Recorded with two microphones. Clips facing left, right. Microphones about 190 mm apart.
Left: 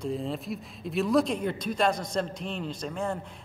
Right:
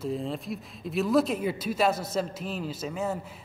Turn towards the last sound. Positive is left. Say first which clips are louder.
# right 1 dB
turn(degrees=-5)  # may be behind; listen again after turning